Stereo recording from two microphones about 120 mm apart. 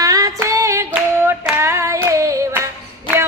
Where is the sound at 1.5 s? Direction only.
20° right (ahead or behind).